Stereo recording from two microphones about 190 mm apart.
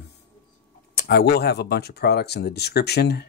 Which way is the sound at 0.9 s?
60° left (ahead or behind).